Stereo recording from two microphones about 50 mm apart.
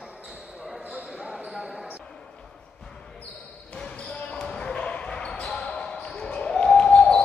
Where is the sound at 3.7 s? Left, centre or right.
Left.